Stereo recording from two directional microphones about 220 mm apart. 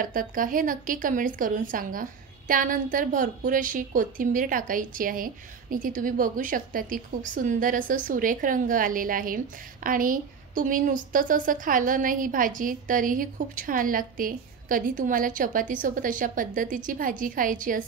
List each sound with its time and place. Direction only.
0.0 s a woman's voice: 40° right (ahead or behind)